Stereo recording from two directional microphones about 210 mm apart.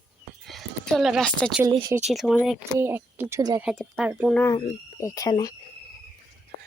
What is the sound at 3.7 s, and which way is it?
Speech, centre (ahead or behind).